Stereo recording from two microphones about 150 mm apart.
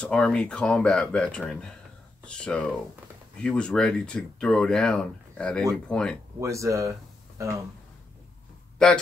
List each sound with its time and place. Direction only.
0.0 s speech: 5° left (ahead or behind)
6.4 s speech: 20° right (ahead or behind)
8.8 s speech: 5° left (ahead or behind)